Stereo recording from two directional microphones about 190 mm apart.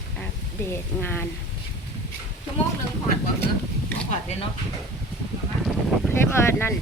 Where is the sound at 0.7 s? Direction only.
10° left (ahead or behind).